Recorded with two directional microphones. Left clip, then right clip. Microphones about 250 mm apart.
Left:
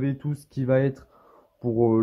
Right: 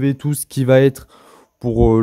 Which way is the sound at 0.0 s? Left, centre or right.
Right.